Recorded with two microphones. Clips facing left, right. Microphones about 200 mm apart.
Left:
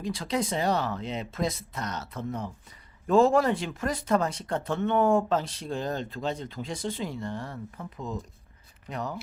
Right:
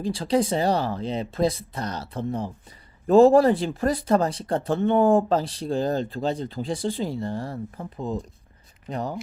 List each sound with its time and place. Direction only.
0.0 s speech: 30° right (ahead or behind)